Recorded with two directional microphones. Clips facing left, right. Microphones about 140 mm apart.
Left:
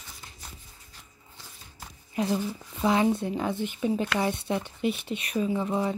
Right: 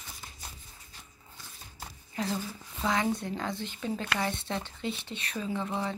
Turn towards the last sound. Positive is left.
turn(degrees=15)  # may be behind; listen again after turning